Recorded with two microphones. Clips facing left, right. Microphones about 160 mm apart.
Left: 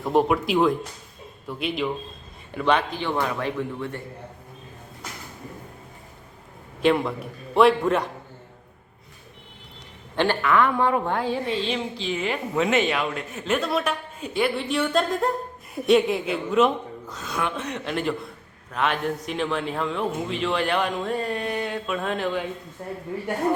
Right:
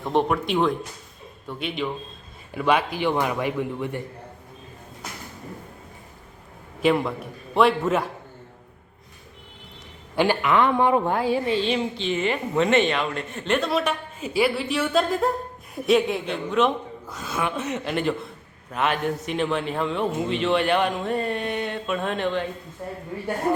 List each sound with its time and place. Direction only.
0.0 s a woman's voice: 5° left (ahead or behind); by 4.0 s 15° right (ahead or behind)
6.8 s a woman's voice: centre (ahead or behind)
10.2 s a woman's voice: 15° right (ahead or behind)
11.1 s a woman's voice: 5° right (ahead or behind)